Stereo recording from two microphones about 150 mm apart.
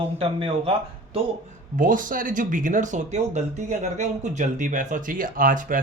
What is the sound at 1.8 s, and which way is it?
Speech, 65° right (ahead or behind).